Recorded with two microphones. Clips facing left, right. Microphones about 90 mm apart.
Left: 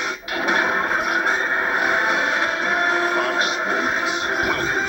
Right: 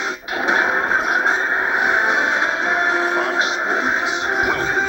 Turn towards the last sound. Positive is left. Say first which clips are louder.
# right 3 dB
turn(degrees=-25)  # may be behind; listen again after turning